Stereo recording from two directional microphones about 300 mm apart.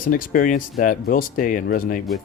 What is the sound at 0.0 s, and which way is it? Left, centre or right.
Speech, left.